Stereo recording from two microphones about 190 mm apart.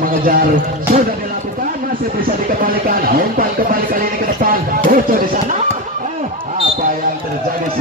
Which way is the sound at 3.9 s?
45° right (ahead or behind).